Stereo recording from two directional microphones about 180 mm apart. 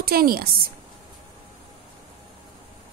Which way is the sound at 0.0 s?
55° right (ahead or behind).